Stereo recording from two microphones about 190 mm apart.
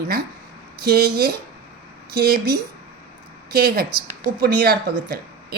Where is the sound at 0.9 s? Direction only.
55° right (ahead or behind).